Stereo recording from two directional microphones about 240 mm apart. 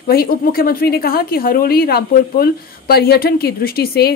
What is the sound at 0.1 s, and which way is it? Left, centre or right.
Speech, left.